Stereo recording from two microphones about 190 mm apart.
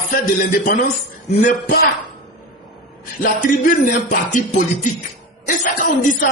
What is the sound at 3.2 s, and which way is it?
A man's voice, 45° left (ahead or behind).